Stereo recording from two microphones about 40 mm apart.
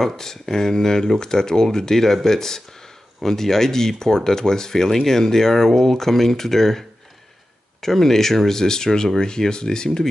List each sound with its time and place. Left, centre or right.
0.0 s speech: centre
7.8 s speech: centre